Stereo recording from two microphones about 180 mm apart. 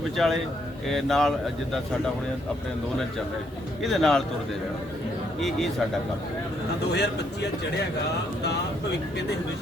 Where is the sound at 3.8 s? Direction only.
Centre (ahead or behind).